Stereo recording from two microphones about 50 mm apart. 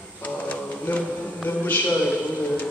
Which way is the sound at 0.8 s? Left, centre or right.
Left.